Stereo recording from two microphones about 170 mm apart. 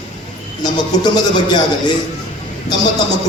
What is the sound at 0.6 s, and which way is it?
Speech, 25° left (ahead or behind).